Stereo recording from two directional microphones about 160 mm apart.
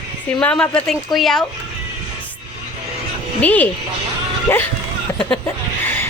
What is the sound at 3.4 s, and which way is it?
Speech, 10° left (ahead or behind).